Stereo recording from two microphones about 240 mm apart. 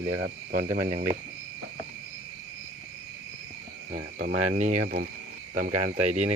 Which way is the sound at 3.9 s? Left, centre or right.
Right.